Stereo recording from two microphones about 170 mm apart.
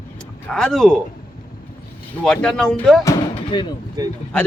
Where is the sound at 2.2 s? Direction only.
5° left (ahead or behind).